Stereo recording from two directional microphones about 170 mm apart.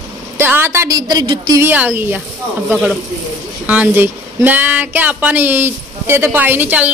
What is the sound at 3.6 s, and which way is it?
Speech, 10° right (ahead or behind).